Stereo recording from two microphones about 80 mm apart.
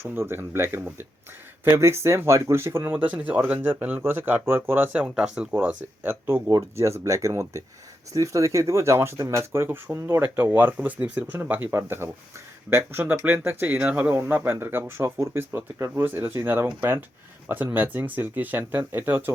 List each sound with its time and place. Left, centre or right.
0.0 s speech: right
5.0 s speech: centre
5.5 s speech: right
6.5 s speech: right